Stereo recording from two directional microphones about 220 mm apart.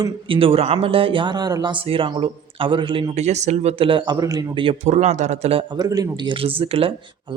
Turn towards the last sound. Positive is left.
turn(degrees=-25)  # may be behind; listen again after turning